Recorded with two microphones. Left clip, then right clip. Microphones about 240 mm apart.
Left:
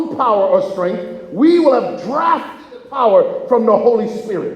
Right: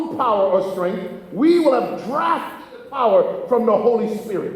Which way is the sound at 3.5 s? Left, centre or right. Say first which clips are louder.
Left 4 dB; left.